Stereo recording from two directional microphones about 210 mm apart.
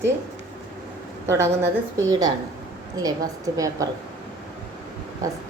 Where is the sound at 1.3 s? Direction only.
10° right (ahead or behind).